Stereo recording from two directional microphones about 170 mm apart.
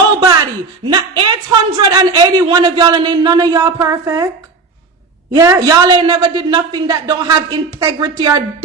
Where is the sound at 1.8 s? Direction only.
20° right (ahead or behind).